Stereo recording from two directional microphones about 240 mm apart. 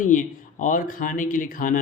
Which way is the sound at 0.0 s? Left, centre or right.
Left.